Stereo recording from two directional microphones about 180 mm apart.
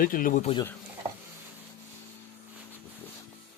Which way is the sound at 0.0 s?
50° left (ahead or behind).